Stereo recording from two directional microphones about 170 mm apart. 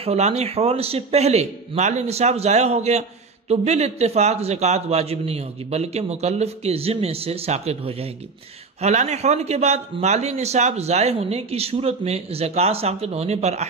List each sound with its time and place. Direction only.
0.0 s a man's voice: 40° right (ahead or behind)